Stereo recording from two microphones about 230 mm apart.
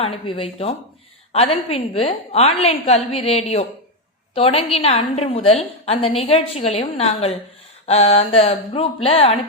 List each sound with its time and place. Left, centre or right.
0.0 s a woman's voice: left
1.7 s a woman's voice: left